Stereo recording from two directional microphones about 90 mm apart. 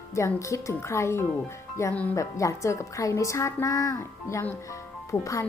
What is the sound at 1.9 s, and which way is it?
Speech, 20° left (ahead or behind).